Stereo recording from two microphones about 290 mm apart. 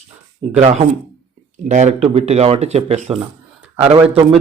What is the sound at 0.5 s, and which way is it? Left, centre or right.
A man's voice, right.